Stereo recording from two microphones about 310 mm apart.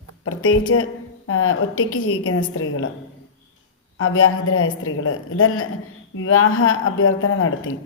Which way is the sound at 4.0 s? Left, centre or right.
Left.